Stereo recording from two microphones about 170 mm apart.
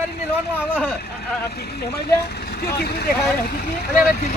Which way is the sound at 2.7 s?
70° left (ahead or behind).